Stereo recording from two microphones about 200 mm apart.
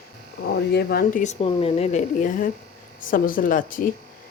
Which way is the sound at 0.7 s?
50° left (ahead or behind).